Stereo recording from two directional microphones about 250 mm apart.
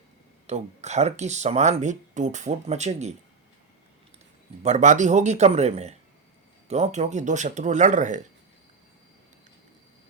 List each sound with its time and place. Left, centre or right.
0.4 s speech: right
4.6 s speech: right